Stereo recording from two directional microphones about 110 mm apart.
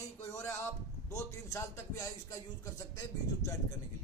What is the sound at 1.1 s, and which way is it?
Speech, 25° left (ahead or behind).